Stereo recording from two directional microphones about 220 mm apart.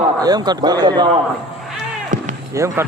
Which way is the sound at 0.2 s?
15° right (ahead or behind).